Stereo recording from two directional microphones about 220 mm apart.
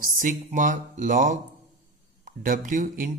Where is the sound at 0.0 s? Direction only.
40° right (ahead or behind).